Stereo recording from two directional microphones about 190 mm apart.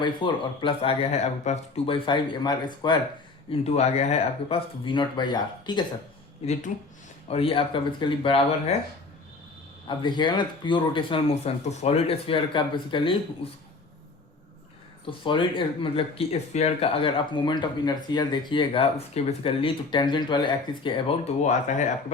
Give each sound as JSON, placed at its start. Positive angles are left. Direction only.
{"t": 0.0, "sound": "speech", "side_deg": 25}
{"t": 3.5, "sound": "speech", "side_deg": 35}
{"t": 6.4, "sound": "speech", "side_deg": 35}
{"t": 9.8, "sound": "speech", "side_deg": 25}
{"t": 15.0, "sound": "speech", "side_deg": 25}
{"t": 21.4, "sound": "speech", "side_deg": 40}